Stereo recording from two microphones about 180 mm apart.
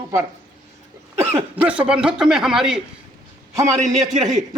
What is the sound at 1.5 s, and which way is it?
Speech, 10° right (ahead or behind).